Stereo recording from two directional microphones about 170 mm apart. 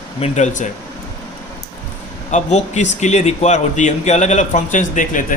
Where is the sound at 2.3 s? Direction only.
40° left (ahead or behind).